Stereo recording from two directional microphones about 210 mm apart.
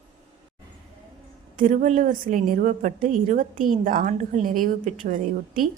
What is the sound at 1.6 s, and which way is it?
A woman's voice, 40° right (ahead or behind).